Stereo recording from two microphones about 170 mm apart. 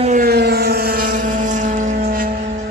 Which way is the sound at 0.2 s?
70° right (ahead or behind).